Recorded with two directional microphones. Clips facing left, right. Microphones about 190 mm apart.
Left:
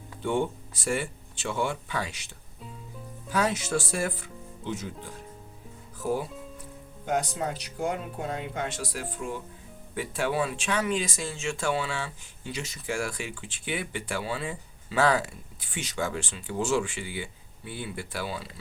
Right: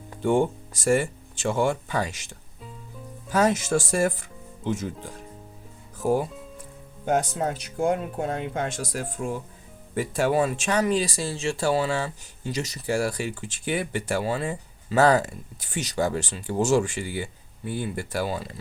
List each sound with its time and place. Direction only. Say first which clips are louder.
0.1 s speech: right 6 dB; 45° right (ahead or behind)